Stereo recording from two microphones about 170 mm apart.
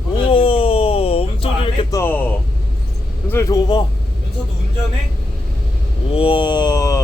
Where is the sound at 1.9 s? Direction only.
15° left (ahead or behind).